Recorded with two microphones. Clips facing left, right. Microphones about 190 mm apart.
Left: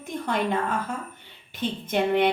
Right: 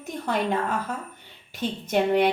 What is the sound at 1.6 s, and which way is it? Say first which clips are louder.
Speech: right 2 dB; 45° right (ahead or behind).